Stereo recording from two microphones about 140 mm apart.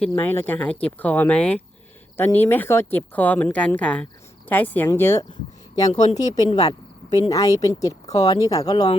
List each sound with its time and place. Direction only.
0.1 s a woman's voice: 15° left (ahead or behind)